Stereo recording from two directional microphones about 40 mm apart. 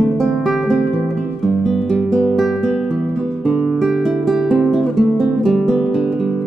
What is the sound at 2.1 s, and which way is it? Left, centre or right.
Guitar, centre.